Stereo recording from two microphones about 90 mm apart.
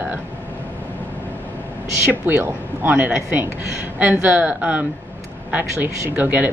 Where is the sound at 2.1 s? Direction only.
20° right (ahead or behind).